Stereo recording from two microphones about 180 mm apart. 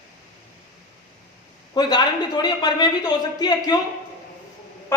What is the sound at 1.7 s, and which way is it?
A woman's voice, 25° left (ahead or behind).